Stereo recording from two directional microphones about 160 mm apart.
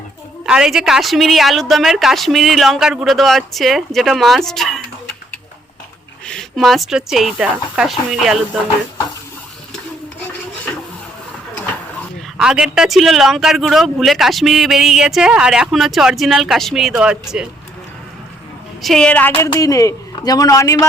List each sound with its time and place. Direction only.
0.4 s speech: 5° right (ahead or behind)
6.2 s speech: centre (ahead or behind)
12.4 s speech: 5° right (ahead or behind)
18.8 s a woman's voice: 5° left (ahead or behind); by 20.8 s 20° left (ahead or behind)